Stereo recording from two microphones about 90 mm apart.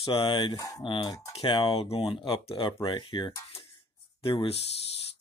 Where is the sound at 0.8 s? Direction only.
65° left (ahead or behind).